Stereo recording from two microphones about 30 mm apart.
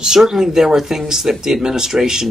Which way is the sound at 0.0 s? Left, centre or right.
Centre.